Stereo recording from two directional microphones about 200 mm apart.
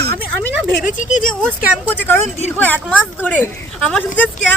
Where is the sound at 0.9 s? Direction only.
40° left (ahead or behind).